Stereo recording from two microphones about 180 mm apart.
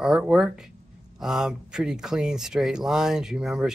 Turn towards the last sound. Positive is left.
turn(degrees=0)  # may be behind; listen again after turning